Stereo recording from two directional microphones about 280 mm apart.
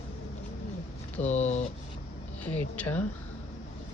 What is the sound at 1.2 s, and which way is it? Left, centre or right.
Speech, left.